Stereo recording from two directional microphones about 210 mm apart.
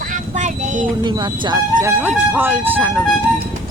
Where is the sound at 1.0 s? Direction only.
20° right (ahead or behind).